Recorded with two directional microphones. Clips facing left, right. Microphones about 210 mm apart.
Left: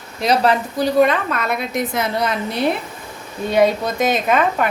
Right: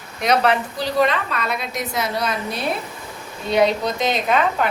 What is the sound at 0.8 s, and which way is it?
A woman's voice, 50° left (ahead or behind).